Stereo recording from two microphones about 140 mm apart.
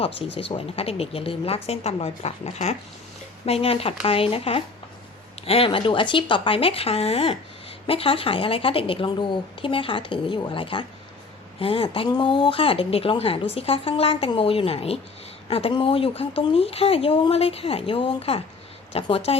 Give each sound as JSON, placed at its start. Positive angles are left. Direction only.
{"t": 0.0, "sound": "speech", "side_deg": 40}